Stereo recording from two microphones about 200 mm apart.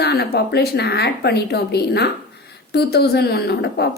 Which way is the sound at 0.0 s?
55° left (ahead or behind).